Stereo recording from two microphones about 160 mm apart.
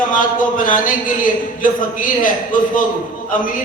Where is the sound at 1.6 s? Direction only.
60° left (ahead or behind).